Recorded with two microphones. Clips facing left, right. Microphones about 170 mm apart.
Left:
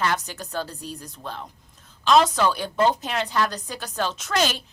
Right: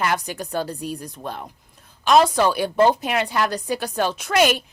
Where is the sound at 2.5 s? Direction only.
10° right (ahead or behind).